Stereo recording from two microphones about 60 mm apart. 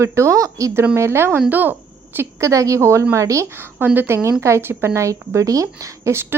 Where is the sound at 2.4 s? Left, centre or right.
Right.